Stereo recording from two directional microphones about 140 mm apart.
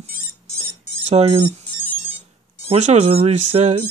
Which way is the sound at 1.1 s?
45° right (ahead or behind).